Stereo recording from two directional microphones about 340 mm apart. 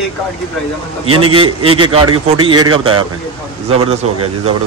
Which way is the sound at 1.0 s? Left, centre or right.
Right.